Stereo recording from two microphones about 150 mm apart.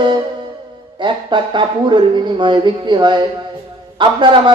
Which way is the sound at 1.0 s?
30° right (ahead or behind).